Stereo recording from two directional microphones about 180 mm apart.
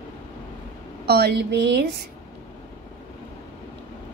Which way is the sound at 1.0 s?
65° right (ahead or behind).